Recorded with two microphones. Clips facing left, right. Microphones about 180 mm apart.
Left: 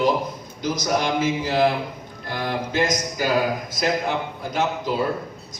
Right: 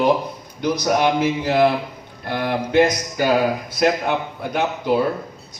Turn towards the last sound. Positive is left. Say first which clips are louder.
# right 4 dB
turn(degrees=-65)  # may be behind; listen again after turning